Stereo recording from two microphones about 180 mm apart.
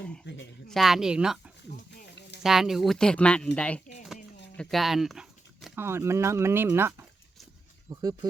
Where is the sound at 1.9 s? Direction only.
70° left (ahead or behind).